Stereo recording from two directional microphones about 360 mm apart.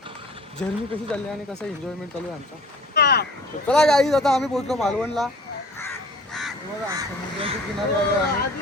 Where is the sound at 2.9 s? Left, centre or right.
Left.